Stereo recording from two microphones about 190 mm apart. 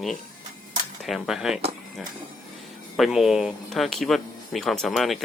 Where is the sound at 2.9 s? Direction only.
Centre (ahead or behind).